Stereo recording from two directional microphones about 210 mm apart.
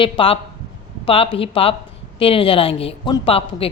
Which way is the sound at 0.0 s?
25° left (ahead or behind).